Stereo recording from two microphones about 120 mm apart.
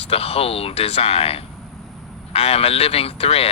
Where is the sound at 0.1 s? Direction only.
55° left (ahead or behind).